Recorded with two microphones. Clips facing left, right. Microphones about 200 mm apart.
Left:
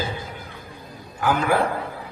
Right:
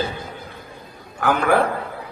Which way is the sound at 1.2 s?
65° right (ahead or behind).